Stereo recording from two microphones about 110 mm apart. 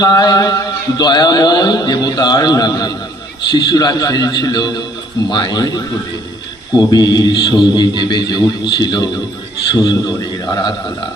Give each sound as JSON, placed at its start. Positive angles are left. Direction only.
{"t": 0.0, "sound": "a man's voice", "side_deg": 40}